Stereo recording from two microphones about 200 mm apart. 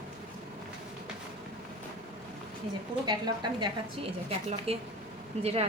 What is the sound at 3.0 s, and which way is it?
A woman's voice, 20° right (ahead or behind).